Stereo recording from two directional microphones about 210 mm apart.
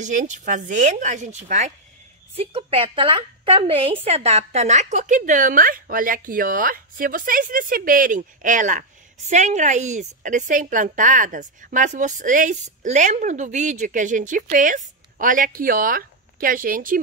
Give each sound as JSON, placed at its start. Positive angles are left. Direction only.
{"t": 0.0, "sound": "a woman's voice", "side_deg": -35}